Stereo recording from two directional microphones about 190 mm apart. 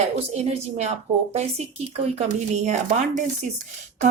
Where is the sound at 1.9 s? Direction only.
35° right (ahead or behind).